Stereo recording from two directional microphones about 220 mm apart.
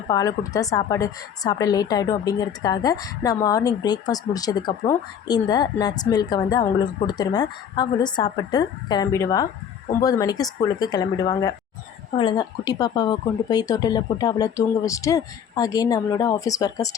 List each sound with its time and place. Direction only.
0.1 s a woman's voice: 15° left (ahead or behind)